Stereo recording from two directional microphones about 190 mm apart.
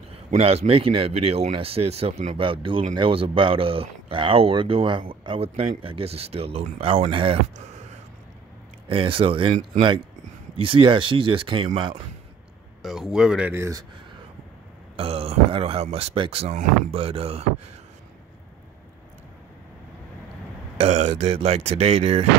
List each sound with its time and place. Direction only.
0.1 s speech: 30° right (ahead or behind)
12.8 s speech: centre (ahead or behind)
15.0 s speech: 30° right (ahead or behind)
20.7 s speech: 35° right (ahead or behind)